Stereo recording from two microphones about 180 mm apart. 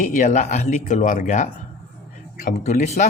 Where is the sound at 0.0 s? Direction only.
45° left (ahead or behind).